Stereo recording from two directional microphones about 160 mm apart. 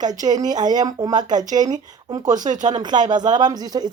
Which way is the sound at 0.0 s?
25° right (ahead or behind).